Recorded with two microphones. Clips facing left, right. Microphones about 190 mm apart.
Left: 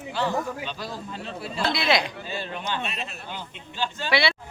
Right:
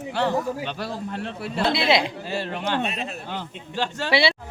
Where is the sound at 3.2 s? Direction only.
70° right (ahead or behind).